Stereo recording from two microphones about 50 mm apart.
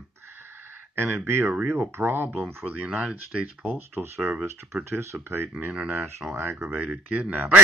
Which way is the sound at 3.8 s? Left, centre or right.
Right.